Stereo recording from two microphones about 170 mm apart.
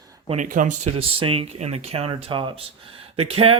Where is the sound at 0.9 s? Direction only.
35° right (ahead or behind).